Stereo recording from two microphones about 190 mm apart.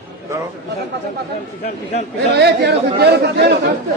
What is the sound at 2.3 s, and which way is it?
Speech, 60° right (ahead or behind).